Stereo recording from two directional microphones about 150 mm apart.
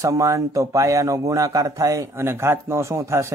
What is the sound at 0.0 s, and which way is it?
Speech, 20° right (ahead or behind).